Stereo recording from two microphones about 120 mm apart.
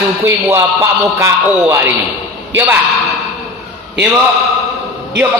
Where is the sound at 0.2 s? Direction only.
25° right (ahead or behind).